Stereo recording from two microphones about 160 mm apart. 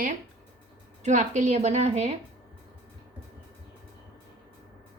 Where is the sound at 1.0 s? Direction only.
45° right (ahead or behind).